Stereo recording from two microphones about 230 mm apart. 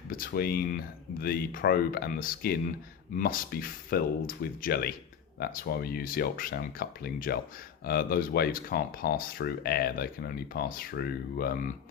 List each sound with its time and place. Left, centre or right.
0.1 s speech: left